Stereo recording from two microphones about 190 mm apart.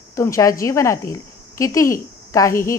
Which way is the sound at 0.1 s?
15° left (ahead or behind).